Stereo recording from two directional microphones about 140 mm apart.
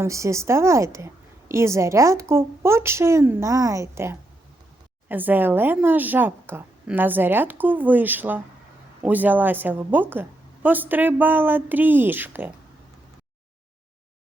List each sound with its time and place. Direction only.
0.0 s a woman's voice: 20° right (ahead or behind)